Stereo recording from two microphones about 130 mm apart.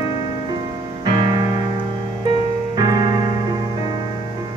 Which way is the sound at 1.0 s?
35° right (ahead or behind).